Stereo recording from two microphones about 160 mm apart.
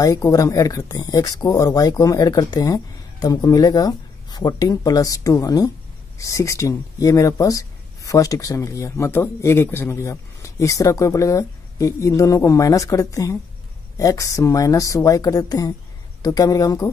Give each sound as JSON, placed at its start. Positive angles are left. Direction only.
{"t": 0.0, "sound": "speech", "side_deg": 20}